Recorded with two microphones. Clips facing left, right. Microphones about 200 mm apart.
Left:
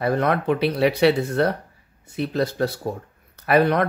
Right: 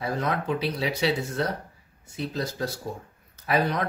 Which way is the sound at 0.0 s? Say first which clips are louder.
Left 7 dB; 65° left (ahead or behind).